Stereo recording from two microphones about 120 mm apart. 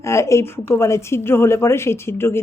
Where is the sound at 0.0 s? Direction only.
25° left (ahead or behind).